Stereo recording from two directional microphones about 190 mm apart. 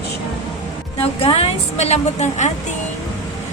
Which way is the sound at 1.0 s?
30° left (ahead or behind).